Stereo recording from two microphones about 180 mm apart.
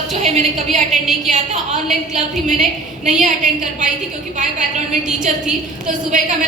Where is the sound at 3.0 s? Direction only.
40° right (ahead or behind).